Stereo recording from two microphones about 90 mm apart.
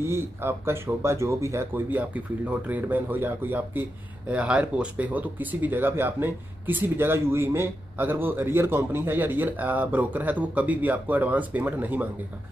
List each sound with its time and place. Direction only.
0.0 s speech: 25° right (ahead or behind)